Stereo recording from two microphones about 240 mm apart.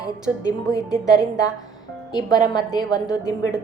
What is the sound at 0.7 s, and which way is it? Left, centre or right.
A woman's voice, centre.